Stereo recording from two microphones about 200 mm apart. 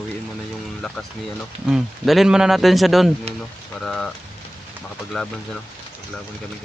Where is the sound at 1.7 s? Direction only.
Centre (ahead or behind).